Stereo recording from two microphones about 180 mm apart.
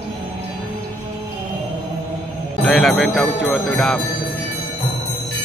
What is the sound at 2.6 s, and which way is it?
Speech, centre (ahead or behind).